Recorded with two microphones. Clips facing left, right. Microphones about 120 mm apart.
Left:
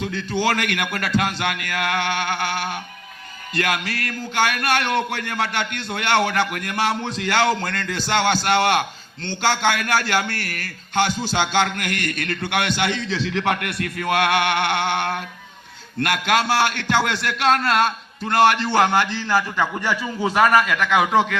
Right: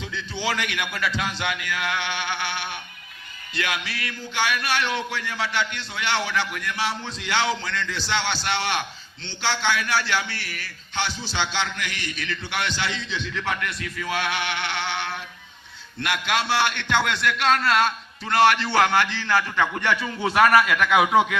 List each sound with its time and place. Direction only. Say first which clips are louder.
0.0 s a man's voice: left 7 dB; 50° left (ahead or behind)
13.2 s a sound: left 6 dB; 65° left (ahead or behind); by 15.2 s 50° left (ahead or behind)
16.0 s a man's voice: left 5 dB; 45° left (ahead or behind)
18.7 s a man's voice: left 2 dB; 15° left (ahead or behind)
20.2 s a man's voice: left 1 dB; centre (ahead or behind)